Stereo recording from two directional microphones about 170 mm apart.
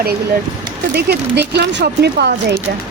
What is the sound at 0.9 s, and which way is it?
A woman's voice, 75° right (ahead or behind).